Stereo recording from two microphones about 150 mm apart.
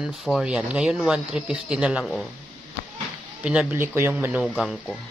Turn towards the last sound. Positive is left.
turn(degrees=0)  # may be behind; listen again after turning